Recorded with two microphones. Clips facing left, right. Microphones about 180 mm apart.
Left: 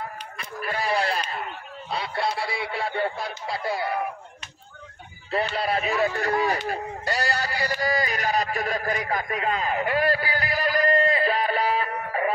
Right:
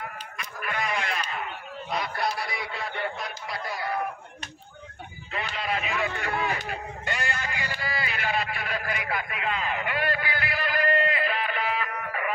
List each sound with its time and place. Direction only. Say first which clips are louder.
0.4 s sheep: left 2 dB; 30° left (ahead or behind)
1.9 s speech: left 2 dB; 30° left (ahead or behind)
5.3 s speech: left 6 dB; 35° left (ahead or behind)
6.7 s a sound: left 5 dB; 35° left (ahead or behind)